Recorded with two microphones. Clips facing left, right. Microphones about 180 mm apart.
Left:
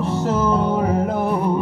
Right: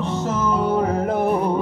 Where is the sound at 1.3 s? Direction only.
10° right (ahead or behind).